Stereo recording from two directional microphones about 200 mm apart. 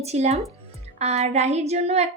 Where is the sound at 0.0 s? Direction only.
30° right (ahead or behind).